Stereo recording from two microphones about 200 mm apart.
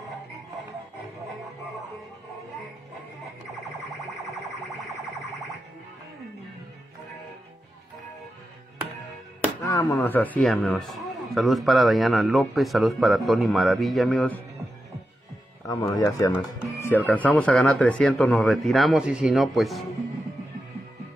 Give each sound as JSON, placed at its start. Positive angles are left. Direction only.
{"t": 9.6, "sound": "speech", "side_deg": 15}
{"t": 15.6, "sound": "speech", "side_deg": 20}